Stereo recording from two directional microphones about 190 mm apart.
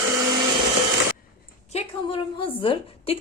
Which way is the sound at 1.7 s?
30° left (ahead or behind).